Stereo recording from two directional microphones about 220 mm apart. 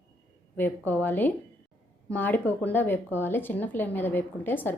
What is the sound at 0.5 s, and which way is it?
Speech, 10° left (ahead or behind).